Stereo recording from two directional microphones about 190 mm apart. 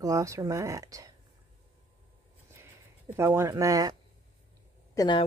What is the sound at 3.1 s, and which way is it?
Speech, 15° right (ahead or behind).